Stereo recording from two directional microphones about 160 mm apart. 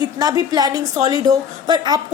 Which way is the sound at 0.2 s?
25° right (ahead or behind).